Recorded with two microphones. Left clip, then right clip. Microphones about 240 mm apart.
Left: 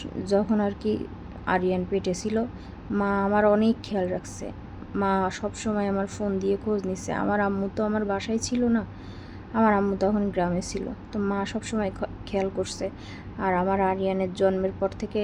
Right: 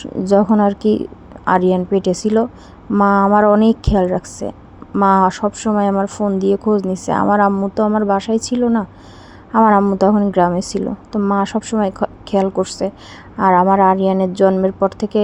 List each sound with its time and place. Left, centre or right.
0.0 s a woman's voice: right